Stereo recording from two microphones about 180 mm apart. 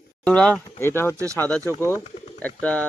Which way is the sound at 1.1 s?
15° right (ahead or behind).